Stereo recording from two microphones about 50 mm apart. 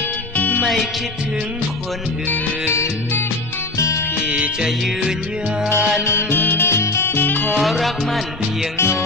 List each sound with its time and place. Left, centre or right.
0.4 s music: left
2.7 s music: left
3.7 s music: left
4.3 s music: right
5.7 s music: left
7.6 s music: centre
8.7 s music: left